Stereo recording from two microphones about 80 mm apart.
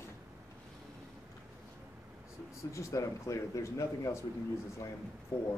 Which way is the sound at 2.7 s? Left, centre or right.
Left.